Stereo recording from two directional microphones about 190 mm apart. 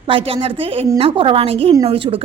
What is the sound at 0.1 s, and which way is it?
A woman's voice, 30° right (ahead or behind).